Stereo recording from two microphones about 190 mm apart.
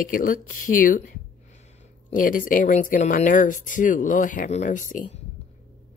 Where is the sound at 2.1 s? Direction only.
45° left (ahead or behind).